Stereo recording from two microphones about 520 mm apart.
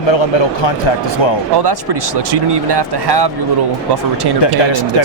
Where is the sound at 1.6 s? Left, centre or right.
Right.